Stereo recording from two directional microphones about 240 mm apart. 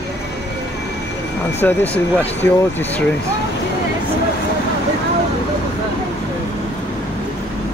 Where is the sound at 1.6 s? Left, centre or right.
Centre.